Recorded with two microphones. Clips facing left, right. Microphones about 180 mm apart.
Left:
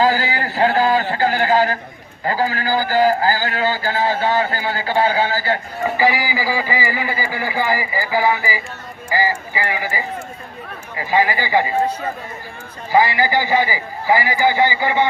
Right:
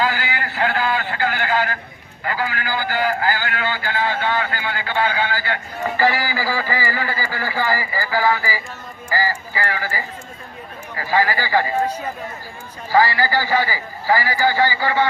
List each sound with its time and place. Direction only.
0.0 s a man's voice: 35° left (ahead or behind)
6.0 s a man's voice: 15° left (ahead or behind)
12.9 s a man's voice: 20° left (ahead or behind)